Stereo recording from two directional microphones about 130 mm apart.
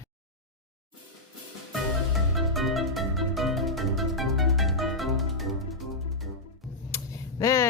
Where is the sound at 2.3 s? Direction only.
Centre (ahead or behind).